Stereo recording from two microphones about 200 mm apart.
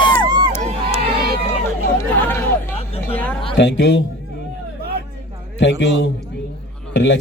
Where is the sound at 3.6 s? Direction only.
60° left (ahead or behind).